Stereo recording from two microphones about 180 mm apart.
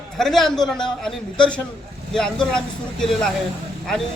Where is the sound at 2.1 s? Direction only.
5° left (ahead or behind).